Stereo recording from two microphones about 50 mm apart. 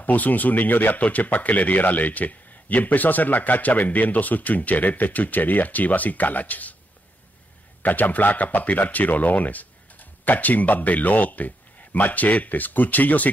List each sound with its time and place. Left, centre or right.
0.0 s speech: left
7.8 s speech: left